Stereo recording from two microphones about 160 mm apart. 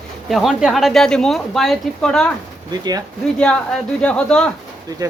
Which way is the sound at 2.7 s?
25° right (ahead or behind).